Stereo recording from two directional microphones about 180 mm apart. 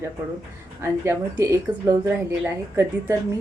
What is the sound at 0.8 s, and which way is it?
Speech, 15° right (ahead or behind).